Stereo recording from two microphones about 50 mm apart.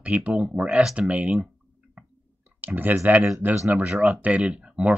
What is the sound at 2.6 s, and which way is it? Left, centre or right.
Speech, right.